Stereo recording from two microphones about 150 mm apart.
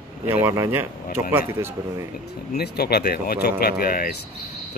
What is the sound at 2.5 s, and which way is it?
Speech, 90° left.